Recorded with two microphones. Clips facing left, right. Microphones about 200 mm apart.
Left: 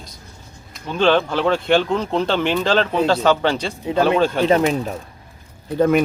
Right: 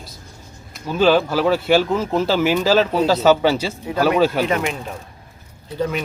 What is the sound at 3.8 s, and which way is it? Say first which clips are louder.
Speech: left 2 dB; 25° left (ahead or behind).